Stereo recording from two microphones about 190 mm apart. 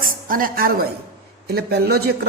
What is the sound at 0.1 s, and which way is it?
A woman's voice, 50° right (ahead or behind).